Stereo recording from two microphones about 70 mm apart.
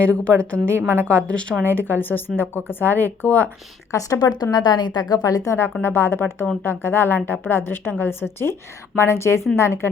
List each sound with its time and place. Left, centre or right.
0.0 s speech: centre
0.8 s a woman's voice: right
1.0 s a woman's voice: centre
1.6 s speech: left
3.9 s a woman's voice: left
4.5 s a woman's voice: left
5.5 s a woman's voice: left